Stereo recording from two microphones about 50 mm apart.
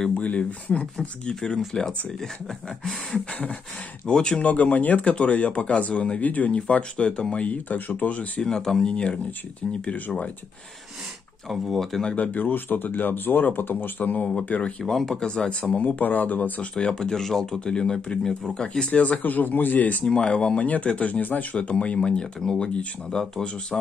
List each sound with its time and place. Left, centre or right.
0.1 s speech: left
1.3 s speech: centre
4.0 s speech: centre
4.5 s speech: left
7.4 s speech: left
8.4 s speech: centre
11.4 s speech: centre
12.2 s speech: left
14.9 s speech: centre
15.2 s speech: centre
15.8 s speech: left
16.7 s speech: centre
18.9 s speech: left
20.1 s speech: centre